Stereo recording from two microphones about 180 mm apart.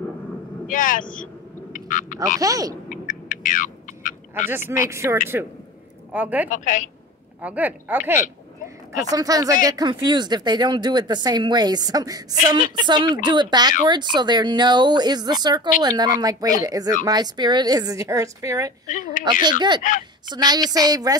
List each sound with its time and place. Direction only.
0.7 s speech: 45° left (ahead or behind)
1.9 s duck: 45° left (ahead or behind)
2.4 s speech: 20° right (ahead or behind)
3.1 s owl: 45° left (ahead or behind)
4.5 s speech: 15° right (ahead or behind)
6.5 s a woman's voice: 45° left (ahead or behind)
7.4 s speech: 10° right (ahead or behind)
9.1 s speech: 20° right (ahead or behind)
18.9 s speech: 45° left (ahead or behind)
20.2 s speech: 20° right (ahead or behind)